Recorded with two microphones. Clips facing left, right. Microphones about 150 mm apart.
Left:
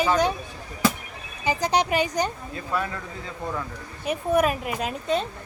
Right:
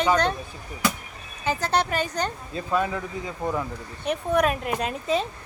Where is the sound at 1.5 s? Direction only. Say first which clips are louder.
Left 2 dB; 15° left (ahead or behind).